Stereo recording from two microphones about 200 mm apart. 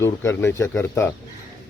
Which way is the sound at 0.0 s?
15° left (ahead or behind).